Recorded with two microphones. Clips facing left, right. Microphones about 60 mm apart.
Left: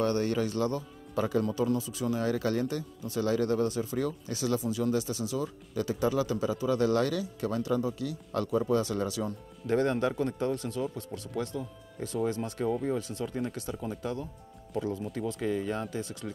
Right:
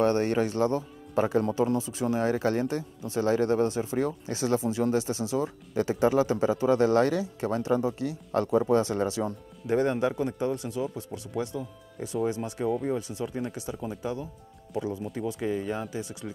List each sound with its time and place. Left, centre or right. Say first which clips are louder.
0.0 s speech: right 4 dB; right
9.7 s speech: right 2 dB; centre